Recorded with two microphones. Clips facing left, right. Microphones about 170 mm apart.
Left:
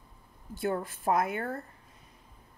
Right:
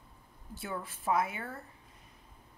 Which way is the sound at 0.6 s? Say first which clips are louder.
Left 9 dB; 50° left (ahead or behind).